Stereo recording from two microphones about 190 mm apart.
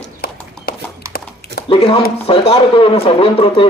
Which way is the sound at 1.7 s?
30° left (ahead or behind).